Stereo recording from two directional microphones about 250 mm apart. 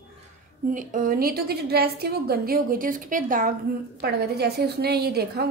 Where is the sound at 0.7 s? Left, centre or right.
Right.